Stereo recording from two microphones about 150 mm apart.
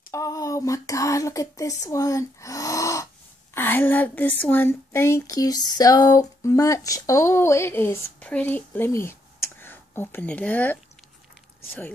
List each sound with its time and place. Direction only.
0.1 s speech: 20° left (ahead or behind)
1.9 s a sound: 20° left (ahead or behind)
3.5 s a woman's voice: 15° left (ahead or behind)